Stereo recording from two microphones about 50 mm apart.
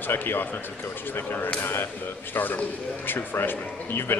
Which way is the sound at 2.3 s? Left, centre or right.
Left.